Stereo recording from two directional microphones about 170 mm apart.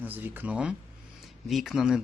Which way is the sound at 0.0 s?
10° right (ahead or behind).